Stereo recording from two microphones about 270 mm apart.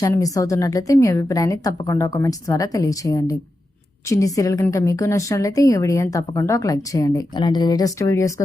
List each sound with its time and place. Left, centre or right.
0.0 s a woman's voice: centre